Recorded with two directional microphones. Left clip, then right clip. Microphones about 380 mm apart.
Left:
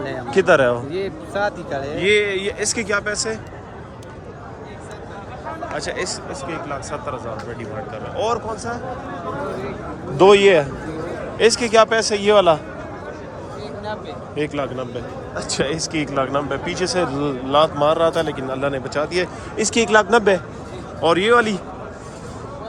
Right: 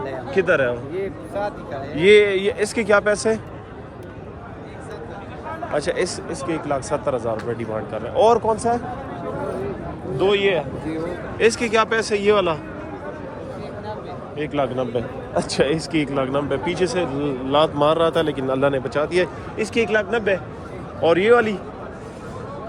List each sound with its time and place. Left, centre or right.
0.3 s a man's voice: centre
0.9 s speech: left
2.0 s a man's voice: centre
5.7 s speech: centre
10.2 s a man's voice: centre
14.3 s a man's voice: centre